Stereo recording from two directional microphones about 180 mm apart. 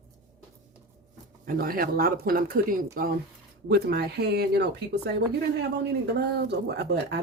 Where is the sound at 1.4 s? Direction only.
50° right (ahead or behind).